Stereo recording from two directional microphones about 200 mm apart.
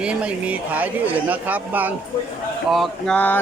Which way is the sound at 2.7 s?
Centre (ahead or behind).